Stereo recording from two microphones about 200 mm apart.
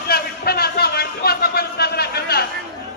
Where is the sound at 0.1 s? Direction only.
50° left (ahead or behind).